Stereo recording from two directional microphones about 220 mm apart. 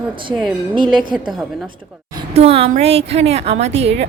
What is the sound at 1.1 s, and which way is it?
Speech, centre (ahead or behind).